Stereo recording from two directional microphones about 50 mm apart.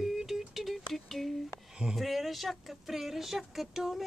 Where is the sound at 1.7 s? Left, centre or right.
Centre.